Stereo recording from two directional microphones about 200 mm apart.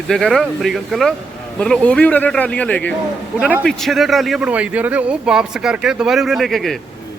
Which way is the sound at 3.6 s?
Centre (ahead or behind).